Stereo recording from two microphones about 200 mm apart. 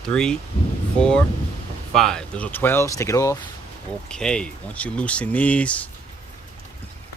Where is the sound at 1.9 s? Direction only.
Centre (ahead or behind).